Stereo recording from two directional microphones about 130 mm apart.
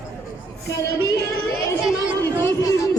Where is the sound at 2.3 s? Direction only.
20° left (ahead or behind).